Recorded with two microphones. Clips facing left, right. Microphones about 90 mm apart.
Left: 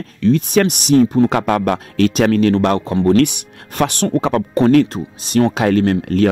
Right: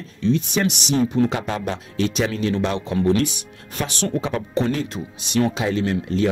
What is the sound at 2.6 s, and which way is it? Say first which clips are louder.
Speech: left 8 dB; 50° left (ahead or behind).